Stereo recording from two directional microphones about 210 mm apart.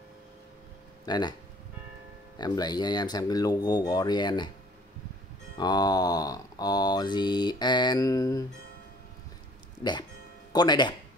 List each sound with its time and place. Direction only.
1.0 s speech: 20° left (ahead or behind)
2.3 s mantra: 20° left (ahead or behind)
5.6 s mantra: 20° left (ahead or behind)
10.5 s mantra: 20° left (ahead or behind)